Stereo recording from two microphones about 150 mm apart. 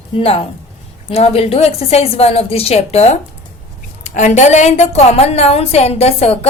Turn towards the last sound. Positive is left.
turn(degrees=40)  # may be behind; listen again after turning